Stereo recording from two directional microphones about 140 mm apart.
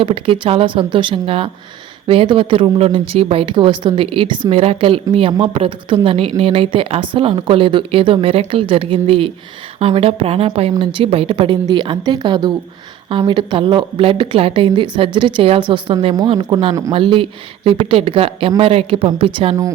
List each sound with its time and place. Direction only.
0.0 s a woman's voice: 40° right (ahead or behind)